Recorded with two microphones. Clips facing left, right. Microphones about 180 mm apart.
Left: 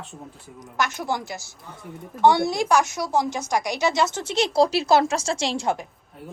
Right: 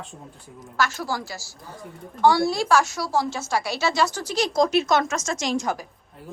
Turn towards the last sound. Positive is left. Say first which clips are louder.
# left 1 dB
turn(degrees=30)  # may be behind; listen again after turning